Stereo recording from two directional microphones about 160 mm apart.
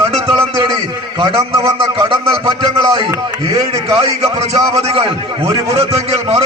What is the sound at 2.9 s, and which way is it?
Speech, 35° right (ahead or behind).